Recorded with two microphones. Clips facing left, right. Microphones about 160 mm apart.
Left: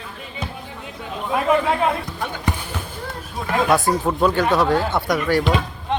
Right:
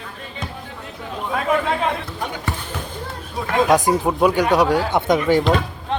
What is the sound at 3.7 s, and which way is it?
Speech, 15° right (ahead or behind).